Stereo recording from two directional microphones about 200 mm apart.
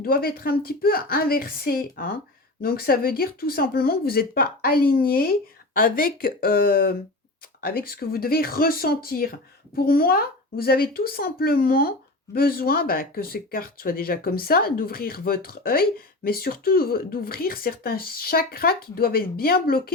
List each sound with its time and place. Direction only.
0.0 s speech: 50° left (ahead or behind)